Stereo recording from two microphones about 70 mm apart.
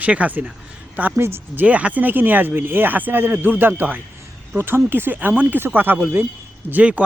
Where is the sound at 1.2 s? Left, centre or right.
Right.